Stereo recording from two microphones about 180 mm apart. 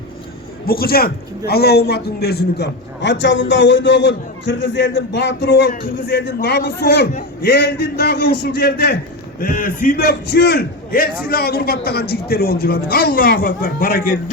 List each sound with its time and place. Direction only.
0.6 s a man's voice: 55° left (ahead or behind)
6.2 s a man's voice: 70° left (ahead or behind); by 14.0 s 50° left (ahead or behind)